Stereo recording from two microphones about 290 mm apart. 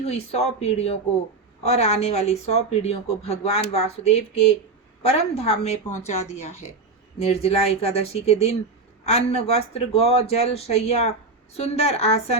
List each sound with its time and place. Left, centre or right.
0.0 s speech: left